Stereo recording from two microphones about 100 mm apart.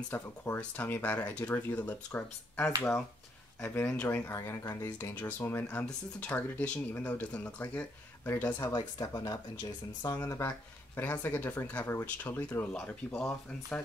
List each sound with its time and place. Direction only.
0.1 s speech: 20° left (ahead or behind)
3.6 s speech: 20° left (ahead or behind)
8.7 s speech: 45° left (ahead or behind); by 13.8 s 15° left (ahead or behind)